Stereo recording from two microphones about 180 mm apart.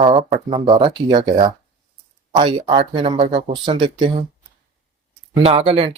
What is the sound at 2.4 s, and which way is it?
Speech, 30° right (ahead or behind).